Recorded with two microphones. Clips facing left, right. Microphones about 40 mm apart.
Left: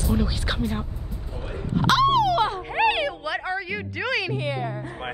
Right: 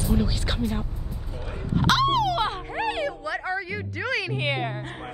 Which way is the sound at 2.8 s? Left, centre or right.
Left.